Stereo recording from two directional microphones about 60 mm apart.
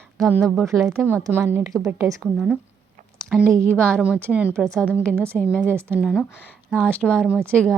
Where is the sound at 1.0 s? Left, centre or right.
Right.